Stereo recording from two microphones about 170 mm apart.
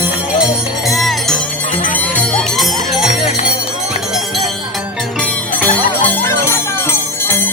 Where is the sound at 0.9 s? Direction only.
Centre (ahead or behind).